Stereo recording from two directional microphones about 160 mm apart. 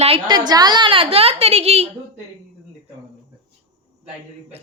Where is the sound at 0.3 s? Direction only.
25° right (ahead or behind).